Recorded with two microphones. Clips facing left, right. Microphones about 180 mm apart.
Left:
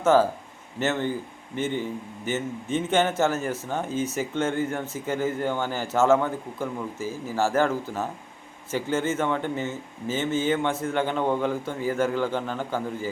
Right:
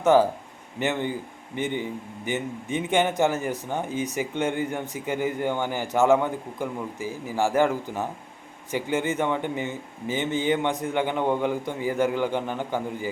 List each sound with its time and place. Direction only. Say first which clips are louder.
0.0 s a man's voice: right 1 dB; 15° right (ahead or behind)